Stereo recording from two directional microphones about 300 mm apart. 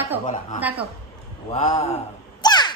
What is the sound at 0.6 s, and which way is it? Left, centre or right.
Speech, centre.